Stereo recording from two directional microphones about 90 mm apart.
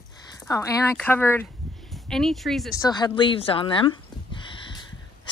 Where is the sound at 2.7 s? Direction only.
50° left (ahead or behind).